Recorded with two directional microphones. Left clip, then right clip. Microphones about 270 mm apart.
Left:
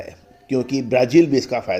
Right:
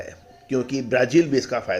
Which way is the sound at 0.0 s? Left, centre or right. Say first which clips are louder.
Left 1 dB; centre.